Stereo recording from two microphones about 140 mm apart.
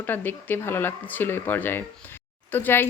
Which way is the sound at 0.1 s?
15° left (ahead or behind).